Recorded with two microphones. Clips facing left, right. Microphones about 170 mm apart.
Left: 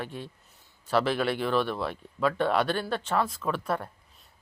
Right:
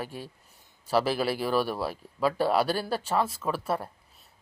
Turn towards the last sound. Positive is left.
turn(degrees=-5)  # may be behind; listen again after turning